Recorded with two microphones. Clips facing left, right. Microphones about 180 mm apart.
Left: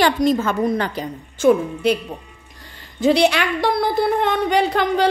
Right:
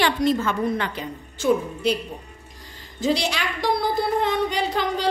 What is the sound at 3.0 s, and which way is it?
A woman's voice, 65° left (ahead or behind).